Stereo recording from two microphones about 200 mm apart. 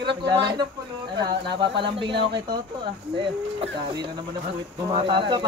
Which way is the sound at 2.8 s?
25° right (ahead or behind).